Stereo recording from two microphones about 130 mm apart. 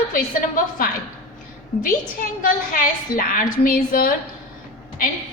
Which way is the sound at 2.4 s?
90° left.